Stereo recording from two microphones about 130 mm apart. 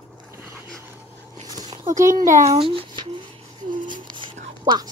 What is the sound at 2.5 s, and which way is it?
Speech, 45° right (ahead or behind).